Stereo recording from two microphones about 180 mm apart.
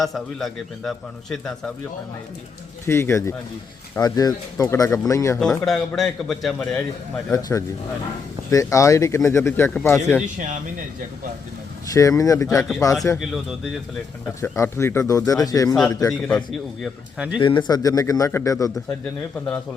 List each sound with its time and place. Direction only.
0.0 s a man's voice: centre (ahead or behind)
2.8 s speech: 15° left (ahead or behind)
5.6 s a man's voice: centre (ahead or behind)
7.3 s speech: 20° left (ahead or behind)
10.2 s speech: 45° right (ahead or behind)
11.9 s speech: 20° left (ahead or behind)
14.4 s speech: 15° left (ahead or behind)
16.0 s a man's voice: 5° left (ahead or behind)
17.4 s speech: 25° left (ahead or behind)